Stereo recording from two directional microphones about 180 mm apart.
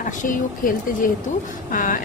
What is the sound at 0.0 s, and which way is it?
Speech, 45° left (ahead or behind).